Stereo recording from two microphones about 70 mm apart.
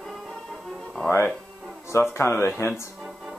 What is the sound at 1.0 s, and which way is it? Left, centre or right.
Speech, left.